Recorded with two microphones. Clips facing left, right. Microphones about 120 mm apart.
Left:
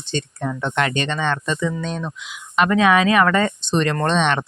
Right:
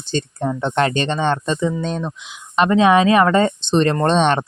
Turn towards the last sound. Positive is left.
turn(degrees=-35)  # may be behind; listen again after turning